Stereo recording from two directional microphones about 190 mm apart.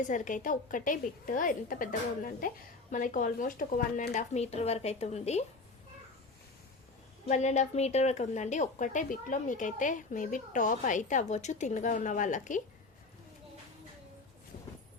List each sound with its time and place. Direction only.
0.1 s a woman's voice: 45° left (ahead or behind)
7.3 s speech: 35° left (ahead or behind)